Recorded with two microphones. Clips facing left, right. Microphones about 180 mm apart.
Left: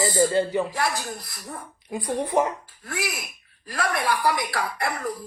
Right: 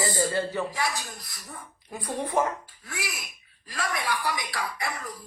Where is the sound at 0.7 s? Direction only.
60° left (ahead or behind).